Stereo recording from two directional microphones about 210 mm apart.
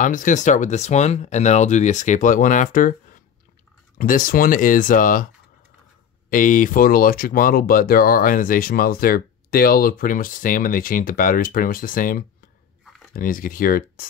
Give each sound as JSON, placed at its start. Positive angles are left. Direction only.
{"t": 0.0, "sound": "speech", "side_deg": 40}
{"t": 6.3, "sound": "speech", "side_deg": 40}